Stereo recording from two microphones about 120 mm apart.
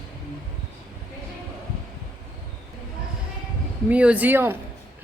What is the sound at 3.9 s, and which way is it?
Speech, 10° right (ahead or behind).